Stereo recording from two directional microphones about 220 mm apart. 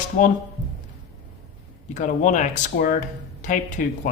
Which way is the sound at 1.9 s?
35° left (ahead or behind).